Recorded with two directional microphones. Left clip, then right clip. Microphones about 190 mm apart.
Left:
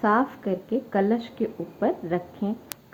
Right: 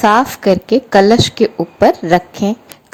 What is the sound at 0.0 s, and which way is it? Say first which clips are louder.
A woman's voice: right 12 dB; 40° right (ahead or behind).